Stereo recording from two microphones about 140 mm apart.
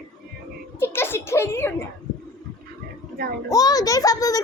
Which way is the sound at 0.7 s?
15° left (ahead or behind).